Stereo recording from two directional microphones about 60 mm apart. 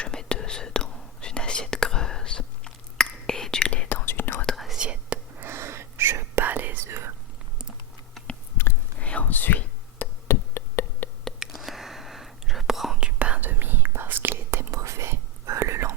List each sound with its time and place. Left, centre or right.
0.0 s whispering: centre
3.7 s whispering: left
4.5 s whispering: centre
4.8 s whispering: centre
5.4 s whispering: right
6.4 s whispering: right
6.8 s whispering: right
9.0 s whispering: left
10.2 s a sound: left
11.5 s whispering: centre
13.1 s whispering: right
14.7 s whispering: right